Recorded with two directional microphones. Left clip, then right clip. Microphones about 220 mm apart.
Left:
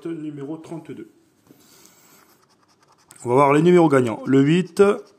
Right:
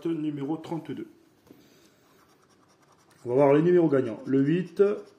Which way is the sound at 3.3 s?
40° left (ahead or behind).